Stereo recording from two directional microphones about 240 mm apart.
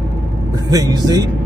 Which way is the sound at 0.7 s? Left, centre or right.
Centre.